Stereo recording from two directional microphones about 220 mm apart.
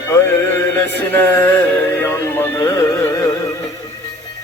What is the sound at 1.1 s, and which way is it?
Music, 10° left (ahead or behind).